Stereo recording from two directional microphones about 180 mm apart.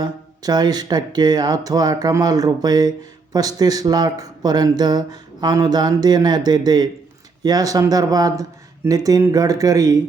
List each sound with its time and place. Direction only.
0.0 s speech: 20° right (ahead or behind)